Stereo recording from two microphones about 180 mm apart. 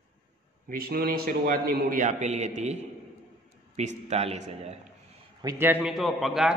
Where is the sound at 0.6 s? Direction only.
55° right (ahead or behind); by 4.8 s 40° right (ahead or behind).